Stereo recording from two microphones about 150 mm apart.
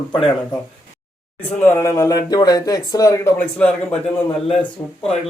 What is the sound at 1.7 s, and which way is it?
A man's voice, 20° left (ahead or behind).